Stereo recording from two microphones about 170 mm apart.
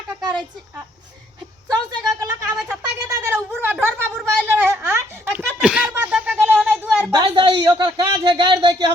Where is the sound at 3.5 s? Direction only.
10° right (ahead or behind).